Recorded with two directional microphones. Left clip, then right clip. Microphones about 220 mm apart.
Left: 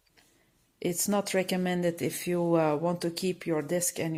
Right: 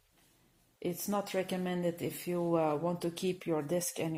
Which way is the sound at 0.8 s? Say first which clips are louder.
Left 6 dB; 45° left (ahead or behind).